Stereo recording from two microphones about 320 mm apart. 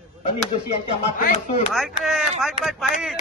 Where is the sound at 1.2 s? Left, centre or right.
Left.